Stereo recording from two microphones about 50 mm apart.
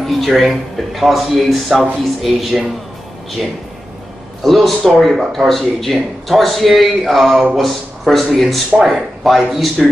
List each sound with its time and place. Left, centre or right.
0.0 s speech: centre
4.4 s speech: centre